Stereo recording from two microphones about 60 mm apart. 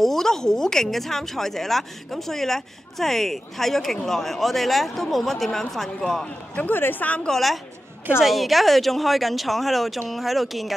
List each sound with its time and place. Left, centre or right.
0.0 s a woman's voice: centre
6.5 s speech: left
7.2 s a woman's voice: centre